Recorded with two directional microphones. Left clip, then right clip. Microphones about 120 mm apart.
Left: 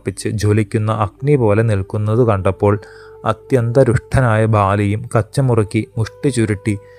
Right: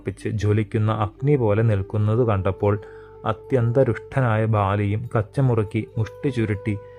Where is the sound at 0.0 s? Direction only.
25° left (ahead or behind).